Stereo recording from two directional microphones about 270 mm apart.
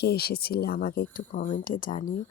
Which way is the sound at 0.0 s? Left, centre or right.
Left.